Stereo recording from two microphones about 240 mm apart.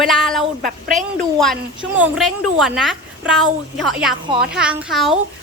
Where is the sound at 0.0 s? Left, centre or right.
Centre.